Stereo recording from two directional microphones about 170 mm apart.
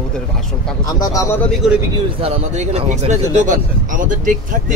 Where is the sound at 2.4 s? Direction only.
40° right (ahead or behind).